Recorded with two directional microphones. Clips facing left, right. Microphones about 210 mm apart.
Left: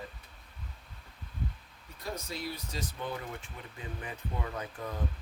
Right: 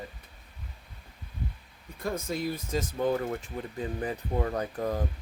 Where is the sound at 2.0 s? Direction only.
50° right (ahead or behind).